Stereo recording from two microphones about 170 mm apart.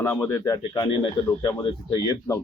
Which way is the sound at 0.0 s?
15° left (ahead or behind).